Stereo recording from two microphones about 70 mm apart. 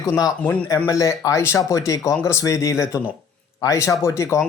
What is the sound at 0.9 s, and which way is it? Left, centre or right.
Speech, left.